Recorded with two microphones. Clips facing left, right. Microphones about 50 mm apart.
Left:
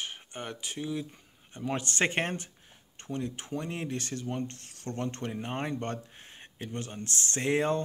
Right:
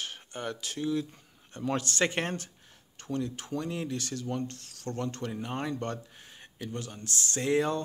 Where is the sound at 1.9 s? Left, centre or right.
Left.